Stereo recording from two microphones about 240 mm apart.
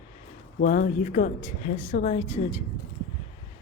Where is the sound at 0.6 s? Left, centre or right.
Left.